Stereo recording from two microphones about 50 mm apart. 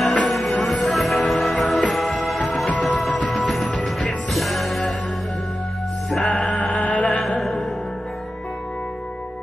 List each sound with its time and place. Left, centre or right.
0.0 s music: centre
6.5 s music: left
7.1 s a sound: centre